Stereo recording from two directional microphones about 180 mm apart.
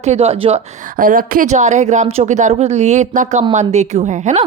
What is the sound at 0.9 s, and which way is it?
Speech, 50° right (ahead or behind).